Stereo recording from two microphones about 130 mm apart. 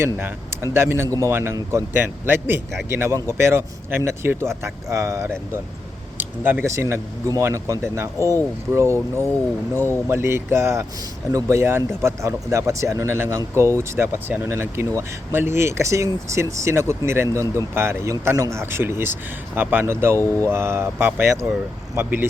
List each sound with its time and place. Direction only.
0.2 s speech: 20° right (ahead or behind)